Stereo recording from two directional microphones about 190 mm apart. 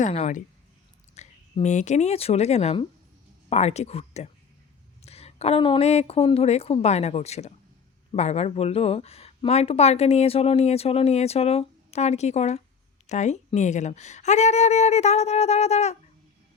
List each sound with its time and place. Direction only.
0.0 s speech: 35° left (ahead or behind)